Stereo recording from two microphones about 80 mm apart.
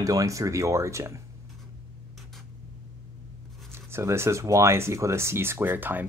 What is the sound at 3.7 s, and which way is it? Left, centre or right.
Speech, right.